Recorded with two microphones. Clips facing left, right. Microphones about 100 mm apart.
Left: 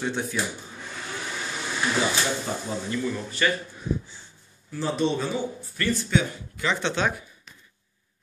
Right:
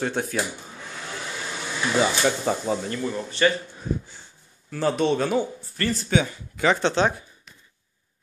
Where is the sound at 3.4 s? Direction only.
35° right (ahead or behind).